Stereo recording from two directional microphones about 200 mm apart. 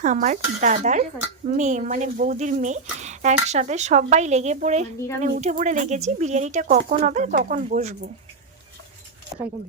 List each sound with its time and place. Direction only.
0.0 s speech: 40° right (ahead or behind)